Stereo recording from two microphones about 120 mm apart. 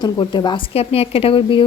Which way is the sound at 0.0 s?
40° left (ahead or behind).